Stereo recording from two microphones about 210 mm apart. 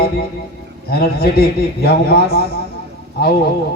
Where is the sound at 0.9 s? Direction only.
45° left (ahead or behind).